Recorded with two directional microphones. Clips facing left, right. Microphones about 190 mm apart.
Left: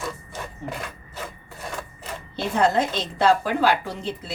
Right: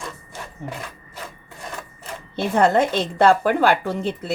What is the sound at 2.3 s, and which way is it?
A woman's voice, 55° right (ahead or behind).